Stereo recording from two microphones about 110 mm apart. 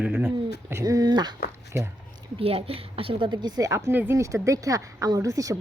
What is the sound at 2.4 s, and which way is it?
A woman's voice, 60° right (ahead or behind).